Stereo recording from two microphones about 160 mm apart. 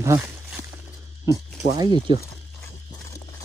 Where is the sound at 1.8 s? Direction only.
25° right (ahead or behind).